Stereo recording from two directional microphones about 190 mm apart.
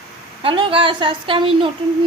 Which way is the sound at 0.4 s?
25° right (ahead or behind).